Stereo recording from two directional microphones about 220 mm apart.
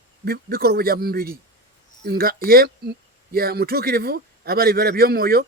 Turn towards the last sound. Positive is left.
turn(degrees=-45)  # may be behind; listen again after turning